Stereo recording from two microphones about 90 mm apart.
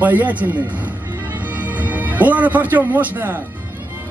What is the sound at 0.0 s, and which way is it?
Speech, 15° right (ahead or behind).